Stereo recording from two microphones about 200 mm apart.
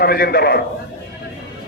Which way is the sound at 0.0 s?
50° left (ahead or behind).